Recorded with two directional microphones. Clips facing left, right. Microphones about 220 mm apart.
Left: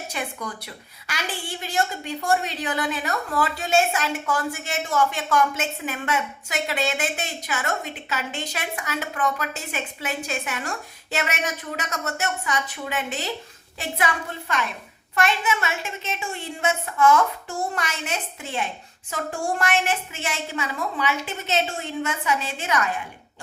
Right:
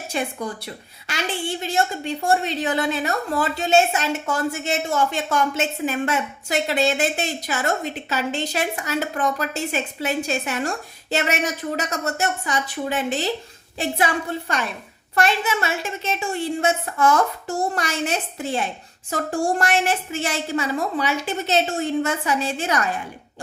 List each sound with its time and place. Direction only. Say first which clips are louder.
0.1 s a woman's voice: right 8 dB; 30° right (ahead or behind)